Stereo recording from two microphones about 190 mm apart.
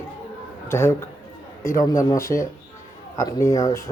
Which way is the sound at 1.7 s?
15° left (ahead or behind).